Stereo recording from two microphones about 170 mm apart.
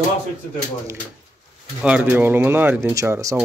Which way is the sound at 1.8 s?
10° right (ahead or behind).